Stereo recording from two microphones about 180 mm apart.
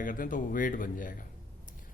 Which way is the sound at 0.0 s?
50° left (ahead or behind).